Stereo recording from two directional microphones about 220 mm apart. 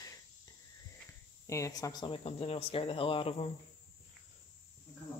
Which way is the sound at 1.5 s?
15° left (ahead or behind).